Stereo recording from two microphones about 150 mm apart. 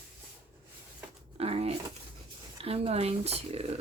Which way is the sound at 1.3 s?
40° right (ahead or behind).